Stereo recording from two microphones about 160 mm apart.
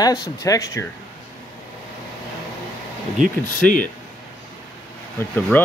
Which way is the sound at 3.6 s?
55° left (ahead or behind).